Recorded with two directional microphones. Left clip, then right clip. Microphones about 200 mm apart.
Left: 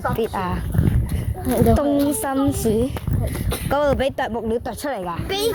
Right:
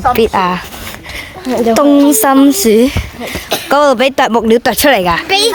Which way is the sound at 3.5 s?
10° right (ahead or behind).